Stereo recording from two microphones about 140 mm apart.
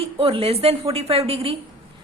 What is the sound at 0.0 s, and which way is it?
A woman's voice, 40° right (ahead or behind).